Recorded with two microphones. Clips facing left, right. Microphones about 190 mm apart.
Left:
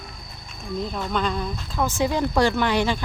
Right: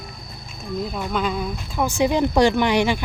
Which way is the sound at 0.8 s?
10° right (ahead or behind).